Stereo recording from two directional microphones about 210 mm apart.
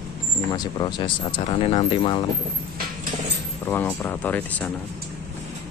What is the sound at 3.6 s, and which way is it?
Speech, 10° left (ahead or behind).